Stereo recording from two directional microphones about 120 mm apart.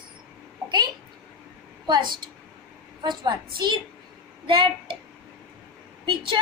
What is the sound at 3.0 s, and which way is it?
A woman's voice, 35° right (ahead or behind).